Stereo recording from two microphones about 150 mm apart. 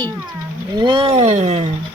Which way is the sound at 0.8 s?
30° right (ahead or behind).